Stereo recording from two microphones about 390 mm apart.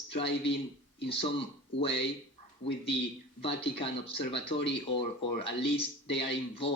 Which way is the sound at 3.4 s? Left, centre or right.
Centre.